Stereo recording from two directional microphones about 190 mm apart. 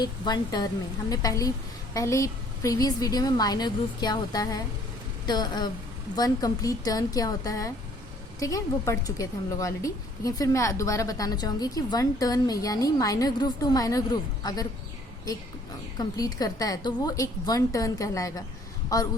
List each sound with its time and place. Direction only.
0.0 s a woman's voice: 20° left (ahead or behind)
16.0 s a woman's voice: 20° left (ahead or behind)